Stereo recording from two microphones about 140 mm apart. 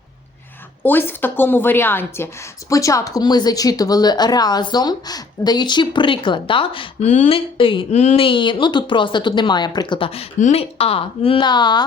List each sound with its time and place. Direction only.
0.8 s a woman's voice: 15° left (ahead or behind); by 7.1 s 40° left (ahead or behind)
7.1 s speech: 55° left (ahead or behind)
7.3 s a woman's voice: 40° left (ahead or behind)
7.9 s a woman's voice: 55° left (ahead or behind); by 11.9 s 30° left (ahead or behind)